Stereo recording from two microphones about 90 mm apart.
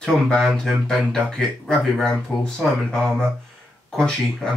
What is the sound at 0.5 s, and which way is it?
Speech, 5° left (ahead or behind).